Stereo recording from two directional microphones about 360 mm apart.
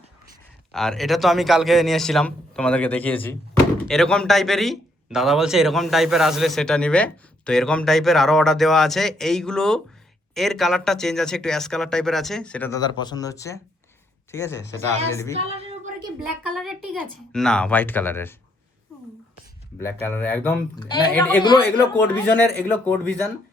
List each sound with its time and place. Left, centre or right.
0.7 s speech: centre
15.1 s female singing: centre
15.4 s a sound: centre
16.2 s speech: centre
19.8 s speech: centre